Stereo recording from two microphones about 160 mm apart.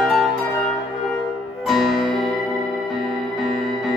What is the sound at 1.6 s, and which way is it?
Music, centre (ahead or behind).